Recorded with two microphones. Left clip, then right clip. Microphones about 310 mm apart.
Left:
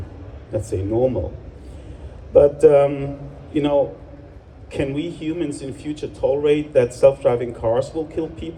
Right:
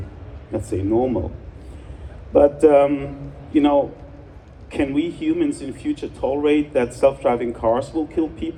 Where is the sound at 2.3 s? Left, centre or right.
Right.